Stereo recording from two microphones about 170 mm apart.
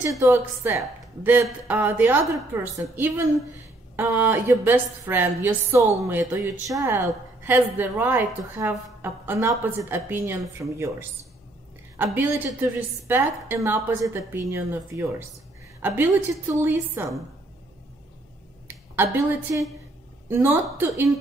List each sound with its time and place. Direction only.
0.2 s a woman's voice: 15° right (ahead or behind)
18.7 s a woman's voice: 10° right (ahead or behind)